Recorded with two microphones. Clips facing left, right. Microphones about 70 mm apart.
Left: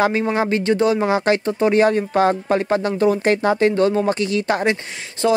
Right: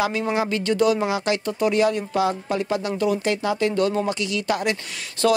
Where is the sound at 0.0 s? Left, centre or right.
Left.